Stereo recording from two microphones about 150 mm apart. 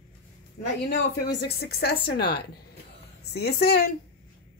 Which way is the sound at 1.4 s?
90° left.